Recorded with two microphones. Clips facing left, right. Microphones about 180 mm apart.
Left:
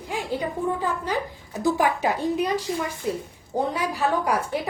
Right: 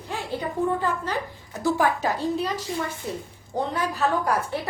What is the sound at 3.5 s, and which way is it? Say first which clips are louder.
Speech: left 1 dB; 10° left (ahead or behind).